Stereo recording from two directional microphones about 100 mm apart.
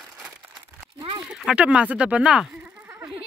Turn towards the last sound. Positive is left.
turn(degrees=-20)  # may be behind; listen again after turning